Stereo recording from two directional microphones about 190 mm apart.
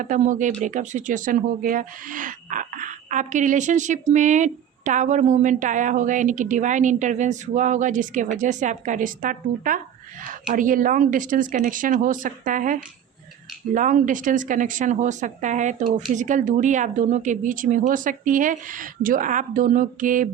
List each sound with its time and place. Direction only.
0.0 s speech: 40° right (ahead or behind)